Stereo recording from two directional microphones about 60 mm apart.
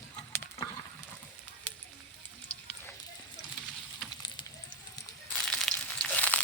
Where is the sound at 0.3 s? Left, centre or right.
Left.